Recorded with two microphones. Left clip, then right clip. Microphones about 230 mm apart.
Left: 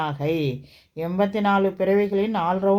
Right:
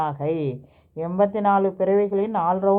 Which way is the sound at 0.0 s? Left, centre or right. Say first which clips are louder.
Even; left.